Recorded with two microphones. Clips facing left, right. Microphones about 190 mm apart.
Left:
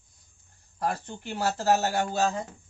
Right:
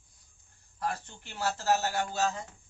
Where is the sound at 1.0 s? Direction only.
60° left (ahead or behind).